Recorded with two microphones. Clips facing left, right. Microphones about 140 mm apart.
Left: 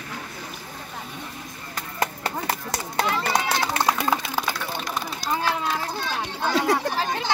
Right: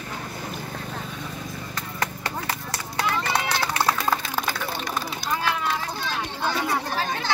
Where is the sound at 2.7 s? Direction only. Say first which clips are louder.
Left 1 dB; 25° left (ahead or behind).